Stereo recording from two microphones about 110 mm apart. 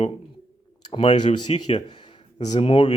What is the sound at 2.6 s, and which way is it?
Speech, 45° left (ahead or behind).